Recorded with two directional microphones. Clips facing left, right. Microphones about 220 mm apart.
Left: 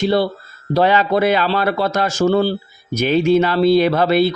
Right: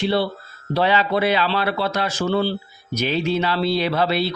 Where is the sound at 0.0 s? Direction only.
45° left (ahead or behind).